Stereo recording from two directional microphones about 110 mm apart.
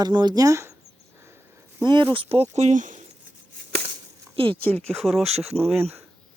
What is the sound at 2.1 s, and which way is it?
Speech, 60° right (ahead or behind).